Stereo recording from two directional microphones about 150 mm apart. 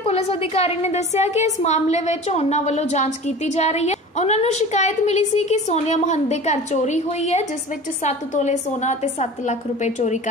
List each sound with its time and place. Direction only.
0.0 s a woman's voice: 40° left (ahead or behind)